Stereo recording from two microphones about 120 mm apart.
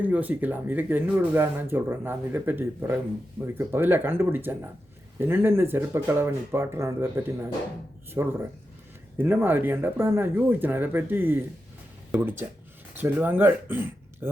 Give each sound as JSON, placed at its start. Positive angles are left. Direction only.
{"t": 0.0, "sound": "speech", "side_deg": -15}
{"t": 13.0, "sound": "speech", "side_deg": -15}